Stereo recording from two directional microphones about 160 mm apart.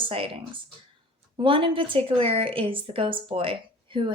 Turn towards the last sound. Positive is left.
turn(degrees=-30)  # may be behind; listen again after turning